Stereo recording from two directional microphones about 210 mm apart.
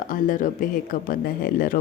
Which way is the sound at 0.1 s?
40° left (ahead or behind).